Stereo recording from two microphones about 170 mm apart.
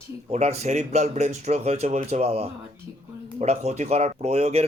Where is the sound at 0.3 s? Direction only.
40° right (ahead or behind).